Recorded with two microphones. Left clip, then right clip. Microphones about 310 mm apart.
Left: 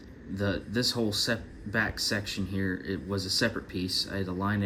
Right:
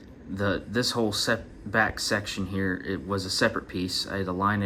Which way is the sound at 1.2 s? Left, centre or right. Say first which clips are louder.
Right 4 dB; right.